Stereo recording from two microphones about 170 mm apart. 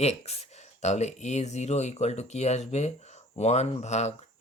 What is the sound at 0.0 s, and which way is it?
Speech, 35° left (ahead or behind).